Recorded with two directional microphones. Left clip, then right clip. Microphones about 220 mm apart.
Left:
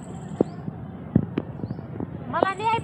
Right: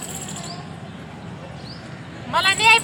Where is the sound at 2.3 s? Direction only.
25° right (ahead or behind).